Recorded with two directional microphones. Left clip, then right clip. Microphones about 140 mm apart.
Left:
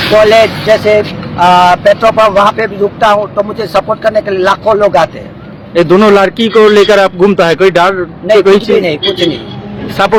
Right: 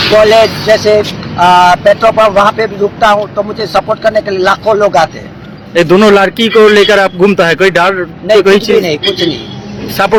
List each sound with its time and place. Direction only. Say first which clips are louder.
0.1 s speech: left 1 dB; 20° left (ahead or behind)
5.7 s a man's voice: even; centre (ahead or behind)
8.7 s speech: even; 20° left (ahead or behind)
10.0 s a man's voice: left 1 dB; centre (ahead or behind)